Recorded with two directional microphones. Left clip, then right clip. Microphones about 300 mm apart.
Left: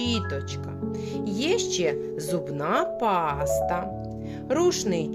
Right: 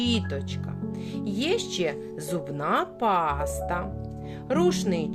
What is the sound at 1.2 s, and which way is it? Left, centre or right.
Speech, centre.